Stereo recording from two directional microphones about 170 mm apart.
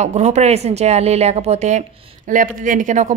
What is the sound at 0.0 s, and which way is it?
Speech, 40° right (ahead or behind).